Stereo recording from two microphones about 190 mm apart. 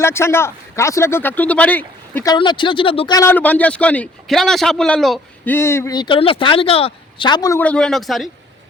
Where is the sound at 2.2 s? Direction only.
25° left (ahead or behind); by 5.5 s centre (ahead or behind).